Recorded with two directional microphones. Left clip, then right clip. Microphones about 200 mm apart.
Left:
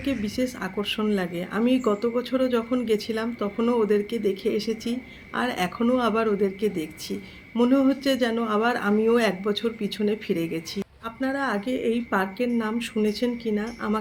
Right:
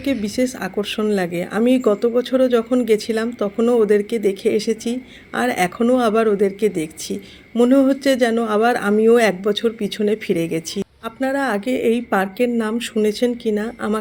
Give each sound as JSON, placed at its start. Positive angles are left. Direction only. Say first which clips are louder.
{"t": 0.0, "sound": "speech", "louder": "right 7 dB", "side_deg": -40}